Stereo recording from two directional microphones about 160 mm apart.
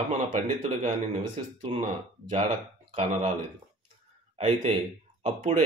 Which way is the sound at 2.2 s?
30° right (ahead or behind).